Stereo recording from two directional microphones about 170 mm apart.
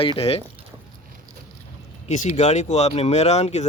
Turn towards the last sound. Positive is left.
turn(degrees=40)  # may be behind; listen again after turning